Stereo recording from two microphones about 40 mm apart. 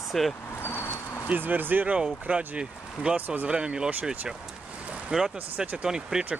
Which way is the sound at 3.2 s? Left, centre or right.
Right.